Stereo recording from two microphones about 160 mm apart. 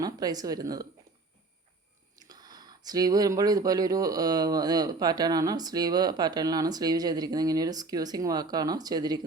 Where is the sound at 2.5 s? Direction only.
25° right (ahead or behind).